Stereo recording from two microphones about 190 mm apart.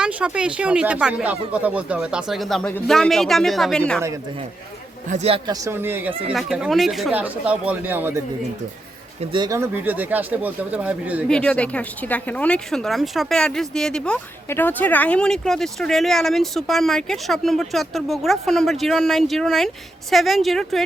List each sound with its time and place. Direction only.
0.0 s speech: 5° right (ahead or behind)
5.0 s speech: 35° right (ahead or behind)
5.5 s speech: 20° right (ahead or behind)
9.3 s speech: 20° right (ahead or behind)
11.3 s speech: 5° left (ahead or behind)